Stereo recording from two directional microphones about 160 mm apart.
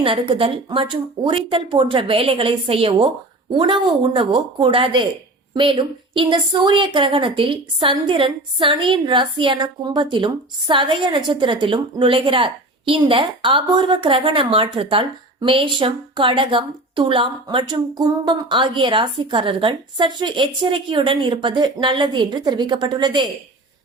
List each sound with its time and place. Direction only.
0.0 s a woman's voice: 35° right (ahead or behind)